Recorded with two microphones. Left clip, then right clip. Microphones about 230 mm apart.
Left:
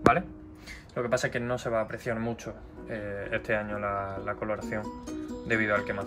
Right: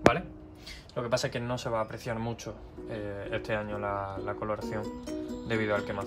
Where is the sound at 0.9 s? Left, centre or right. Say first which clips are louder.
Left 2 dB; centre.